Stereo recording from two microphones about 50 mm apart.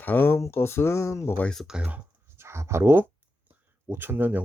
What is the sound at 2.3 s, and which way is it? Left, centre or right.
Writing, right.